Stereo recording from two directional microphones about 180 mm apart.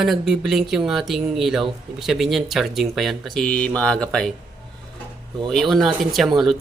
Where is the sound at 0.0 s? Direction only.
Centre (ahead or behind).